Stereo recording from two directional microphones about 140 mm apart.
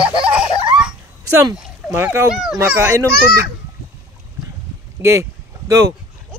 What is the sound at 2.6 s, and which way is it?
Speech, 20° right (ahead or behind).